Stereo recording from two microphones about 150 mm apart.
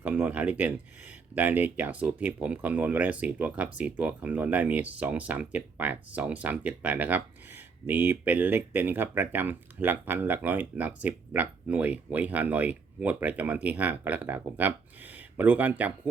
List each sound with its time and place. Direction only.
0.0 s speech: 10° right (ahead or behind)